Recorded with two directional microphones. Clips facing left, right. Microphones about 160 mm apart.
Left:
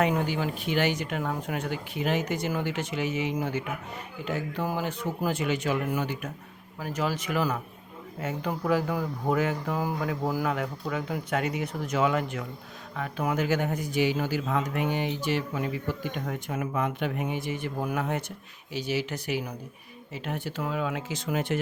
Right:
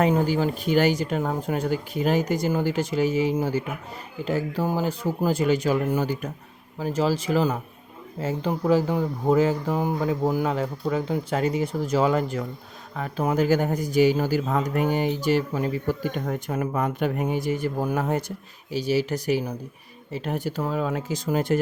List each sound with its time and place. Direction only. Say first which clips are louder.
0.0 s speech: right 5 dB; 35° right (ahead or behind)